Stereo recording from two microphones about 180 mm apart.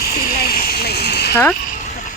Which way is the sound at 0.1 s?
55° left (ahead or behind).